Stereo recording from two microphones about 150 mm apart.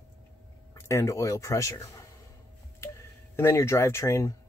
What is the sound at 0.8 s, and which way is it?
Speech, 20° left (ahead or behind).